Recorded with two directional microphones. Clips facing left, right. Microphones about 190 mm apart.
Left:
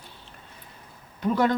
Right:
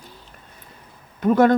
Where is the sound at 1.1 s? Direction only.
50° right (ahead or behind).